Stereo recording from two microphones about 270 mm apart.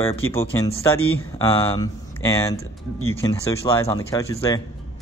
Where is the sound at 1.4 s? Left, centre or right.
Centre.